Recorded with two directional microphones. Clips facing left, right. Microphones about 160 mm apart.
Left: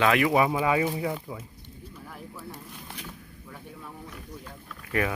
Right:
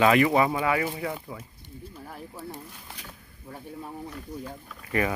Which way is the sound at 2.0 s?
30° right (ahead or behind).